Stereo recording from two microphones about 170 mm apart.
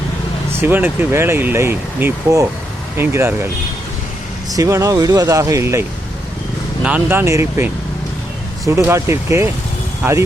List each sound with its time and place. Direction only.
0.6 s speech: 15° right (ahead or behind)
4.5 s speech: 20° right (ahead or behind)
6.8 s speech: 10° right (ahead or behind)